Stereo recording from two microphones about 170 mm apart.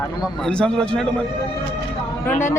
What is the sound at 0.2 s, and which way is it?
Speech, 5° left (ahead or behind).